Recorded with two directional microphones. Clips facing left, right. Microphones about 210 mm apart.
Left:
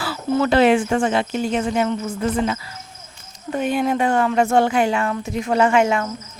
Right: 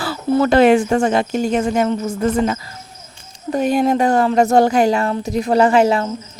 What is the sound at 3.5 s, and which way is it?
Speech, 40° right (ahead or behind).